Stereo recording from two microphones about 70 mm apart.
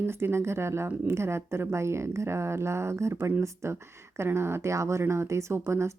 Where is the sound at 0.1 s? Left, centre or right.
Right.